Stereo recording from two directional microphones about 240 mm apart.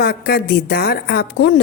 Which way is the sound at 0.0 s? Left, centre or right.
Left.